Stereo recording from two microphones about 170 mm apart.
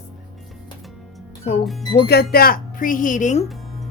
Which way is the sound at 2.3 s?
60° left (ahead or behind).